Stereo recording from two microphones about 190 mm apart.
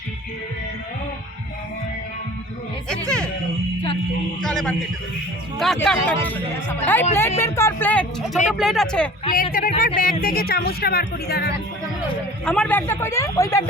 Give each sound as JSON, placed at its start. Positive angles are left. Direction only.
{"t": 2.9, "sound": "music", "side_deg": 5}
{"t": 4.4, "sound": "speech", "side_deg": 0}
{"t": 9.3, "sound": "speech", "side_deg": 50}
{"t": 12.5, "sound": "speech", "side_deg": 5}